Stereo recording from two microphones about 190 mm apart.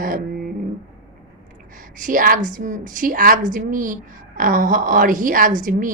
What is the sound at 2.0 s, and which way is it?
A woman's voice, 45° right (ahead or behind).